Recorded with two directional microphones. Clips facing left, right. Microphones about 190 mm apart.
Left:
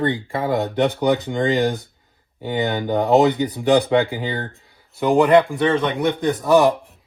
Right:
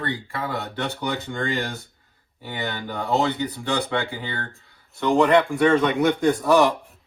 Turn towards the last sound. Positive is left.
turn(degrees=0)  # may be behind; listen again after turning